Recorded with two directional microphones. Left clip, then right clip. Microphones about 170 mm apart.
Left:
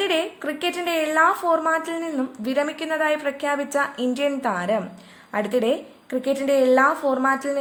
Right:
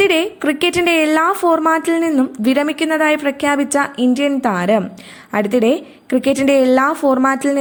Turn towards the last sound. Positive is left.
turn(degrees=-25)  # may be behind; listen again after turning